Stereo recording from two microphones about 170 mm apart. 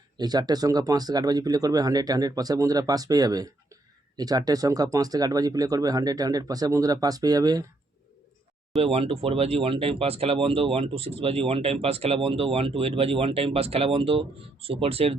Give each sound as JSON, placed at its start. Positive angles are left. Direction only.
{"t": 0.2, "sound": "speech", "side_deg": -25}
{"t": 8.8, "sound": "speech", "side_deg": -35}